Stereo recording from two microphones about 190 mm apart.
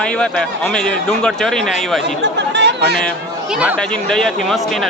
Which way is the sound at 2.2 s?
65° right (ahead or behind).